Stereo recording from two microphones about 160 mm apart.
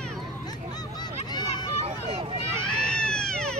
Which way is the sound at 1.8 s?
40° right (ahead or behind).